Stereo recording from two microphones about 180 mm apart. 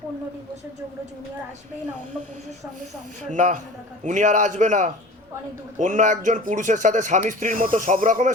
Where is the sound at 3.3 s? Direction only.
45° right (ahead or behind).